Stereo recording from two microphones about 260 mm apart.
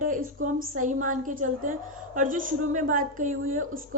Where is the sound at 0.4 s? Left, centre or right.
Right.